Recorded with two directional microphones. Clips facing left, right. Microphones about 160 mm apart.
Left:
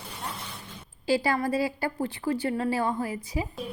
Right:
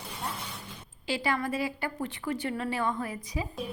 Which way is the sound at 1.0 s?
35° left (ahead or behind).